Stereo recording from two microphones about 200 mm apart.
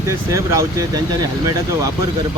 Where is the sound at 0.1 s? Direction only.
15° right (ahead or behind).